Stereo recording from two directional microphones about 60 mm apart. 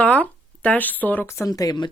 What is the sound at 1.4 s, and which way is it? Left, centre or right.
Speech, left.